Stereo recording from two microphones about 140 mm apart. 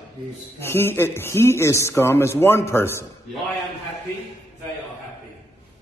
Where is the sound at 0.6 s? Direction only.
15° left (ahead or behind).